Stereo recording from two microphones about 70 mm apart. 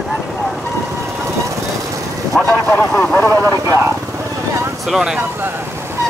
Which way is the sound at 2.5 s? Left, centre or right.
Left.